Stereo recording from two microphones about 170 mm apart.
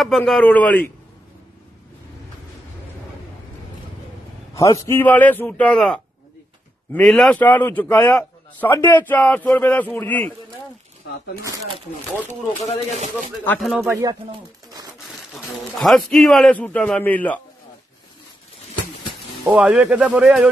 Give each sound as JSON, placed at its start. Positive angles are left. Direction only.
{"t": 0.0, "sound": "speech", "side_deg": 0}
{"t": 4.7, "sound": "speech", "side_deg": 15}
{"t": 11.4, "sound": "speech", "side_deg": -20}
{"t": 12.9, "sound": "speech", "side_deg": -40}
{"t": 13.4, "sound": "speech", "side_deg": 10}
{"t": 13.7, "sound": "speech", "side_deg": -15}
{"t": 15.3, "sound": "a man's voice", "side_deg": 0}
{"t": 19.4, "sound": "a man's voice", "side_deg": -10}